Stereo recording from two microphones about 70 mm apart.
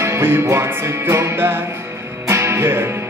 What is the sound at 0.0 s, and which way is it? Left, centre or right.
Music, right.